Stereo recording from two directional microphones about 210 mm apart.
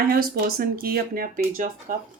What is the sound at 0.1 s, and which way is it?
Speech, 45° right (ahead or behind).